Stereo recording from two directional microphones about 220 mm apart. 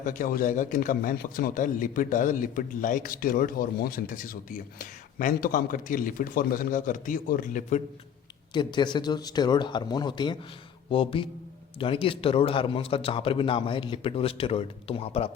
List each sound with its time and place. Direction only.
0.0 s speech: 35° left (ahead or behind)
8.5 s a man's voice: 20° left (ahead or behind)